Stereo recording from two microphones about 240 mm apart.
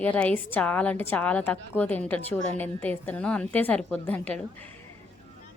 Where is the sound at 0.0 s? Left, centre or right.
Centre.